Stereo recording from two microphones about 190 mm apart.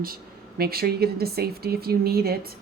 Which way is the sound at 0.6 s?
55° right (ahead or behind).